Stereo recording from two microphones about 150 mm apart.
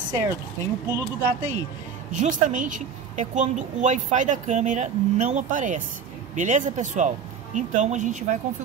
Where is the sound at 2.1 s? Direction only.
55° right (ahead or behind).